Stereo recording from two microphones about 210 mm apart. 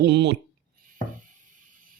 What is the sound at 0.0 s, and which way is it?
Speech, 55° right (ahead or behind).